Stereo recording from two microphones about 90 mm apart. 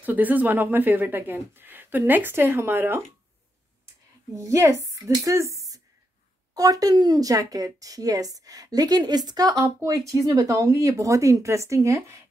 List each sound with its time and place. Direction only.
0.0 s speech: 20° right (ahead or behind)
4.4 s a woman's voice: 35° right (ahead or behind)